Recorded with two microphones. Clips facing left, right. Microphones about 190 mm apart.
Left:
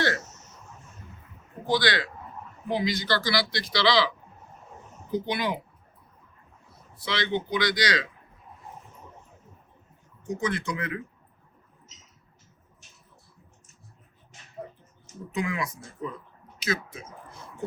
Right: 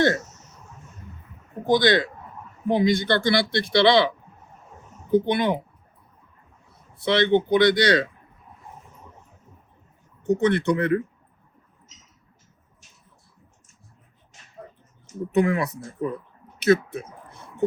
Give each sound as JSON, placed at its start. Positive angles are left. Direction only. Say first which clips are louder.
{"t": 1.7, "sound": "speech", "louder": "right 7 dB", "side_deg": -20}
{"t": 2.6, "sound": "speech", "louder": "right 7 dB", "side_deg": -55}
{"t": 5.1, "sound": "speech", "louder": "right 8 dB", "side_deg": -55}
{"t": 7.0, "sound": "speech", "louder": "right 10 dB", "side_deg": -60}
{"t": 10.2, "sound": "speech", "louder": "right 9 dB", "side_deg": -65}
{"t": 15.0, "sound": "speech", "louder": "right 10 dB", "side_deg": -60}